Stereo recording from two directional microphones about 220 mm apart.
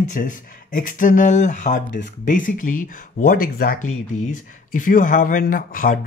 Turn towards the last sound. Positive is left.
turn(degrees=40)  # may be behind; listen again after turning